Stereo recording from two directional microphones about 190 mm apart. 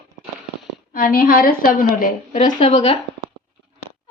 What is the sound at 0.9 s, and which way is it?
A woman's voice, 45° left (ahead or behind).